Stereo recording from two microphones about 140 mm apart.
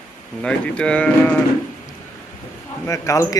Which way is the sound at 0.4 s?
5° left (ahead or behind).